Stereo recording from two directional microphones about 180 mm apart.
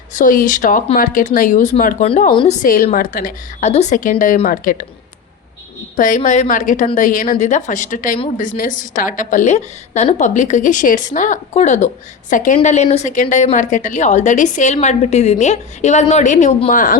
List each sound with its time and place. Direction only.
0.1 s a woman's voice: 45° left (ahead or behind)
3.7 s a woman's voice: 40° left (ahead or behind)
6.0 s a woman's voice: 45° left (ahead or behind)